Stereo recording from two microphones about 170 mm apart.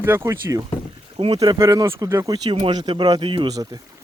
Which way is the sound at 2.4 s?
30° right (ahead or behind).